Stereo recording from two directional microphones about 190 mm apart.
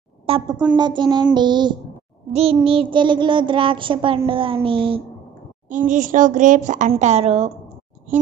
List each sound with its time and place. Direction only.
0.3 s child singing: 30° right (ahead or behind)
5.7 s speech: 45° right (ahead or behind)